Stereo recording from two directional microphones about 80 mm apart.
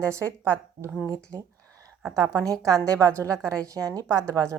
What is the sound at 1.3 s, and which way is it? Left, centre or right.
Speech, right.